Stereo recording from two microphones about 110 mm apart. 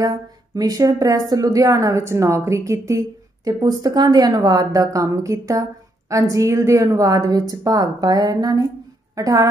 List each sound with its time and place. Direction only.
0.6 s a woman's voice: 35° right (ahead or behind)